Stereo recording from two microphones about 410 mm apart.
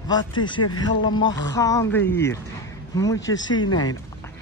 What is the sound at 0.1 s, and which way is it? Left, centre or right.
Speech, centre.